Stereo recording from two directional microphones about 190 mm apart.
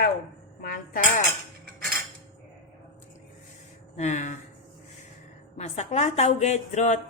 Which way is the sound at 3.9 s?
35° left (ahead or behind).